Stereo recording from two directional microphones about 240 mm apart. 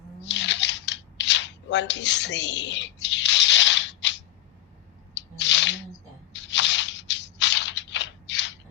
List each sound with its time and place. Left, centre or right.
0.3 s scissors: left
5.1 s squish: left
6.3 s a sound: left